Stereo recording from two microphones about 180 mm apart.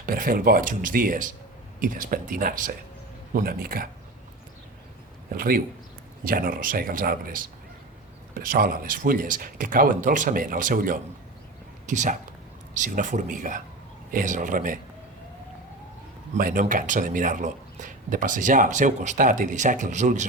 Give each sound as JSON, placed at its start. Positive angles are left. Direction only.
{"t": 0.0, "sound": "speech", "side_deg": -50}
{"t": 5.3, "sound": "speech", "side_deg": -55}
{"t": 16.3, "sound": "speech", "side_deg": -50}